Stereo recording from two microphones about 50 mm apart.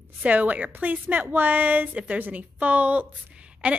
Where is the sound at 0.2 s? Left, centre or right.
Right.